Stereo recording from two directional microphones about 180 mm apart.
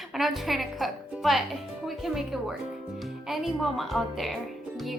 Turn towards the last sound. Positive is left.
turn(degrees=0)  # may be behind; listen again after turning